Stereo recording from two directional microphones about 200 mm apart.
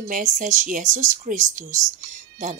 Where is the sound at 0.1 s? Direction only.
40° right (ahead or behind).